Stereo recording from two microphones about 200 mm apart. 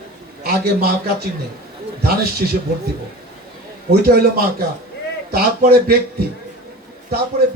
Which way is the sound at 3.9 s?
50° right (ahead or behind).